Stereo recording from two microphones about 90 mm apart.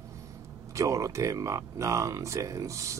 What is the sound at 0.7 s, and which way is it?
Speech, 35° right (ahead or behind).